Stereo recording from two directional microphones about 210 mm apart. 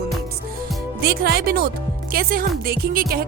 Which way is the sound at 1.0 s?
50° right (ahead or behind).